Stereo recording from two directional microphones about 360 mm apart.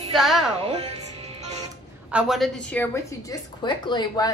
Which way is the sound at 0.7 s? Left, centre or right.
Centre.